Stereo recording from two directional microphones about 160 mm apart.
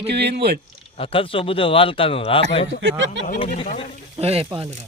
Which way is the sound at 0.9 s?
35° left (ahead or behind).